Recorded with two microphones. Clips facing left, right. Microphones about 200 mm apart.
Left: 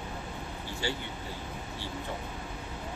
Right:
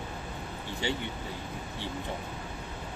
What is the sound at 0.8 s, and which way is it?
Speech, 20° right (ahead or behind).